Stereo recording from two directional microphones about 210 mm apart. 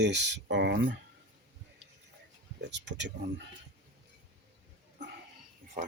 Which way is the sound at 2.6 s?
55° right (ahead or behind).